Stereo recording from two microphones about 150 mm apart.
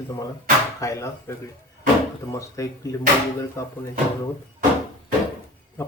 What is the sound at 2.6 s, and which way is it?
Speech, 20° left (ahead or behind).